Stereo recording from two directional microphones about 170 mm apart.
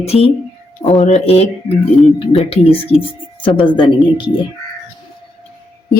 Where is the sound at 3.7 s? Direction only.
30° left (ahead or behind).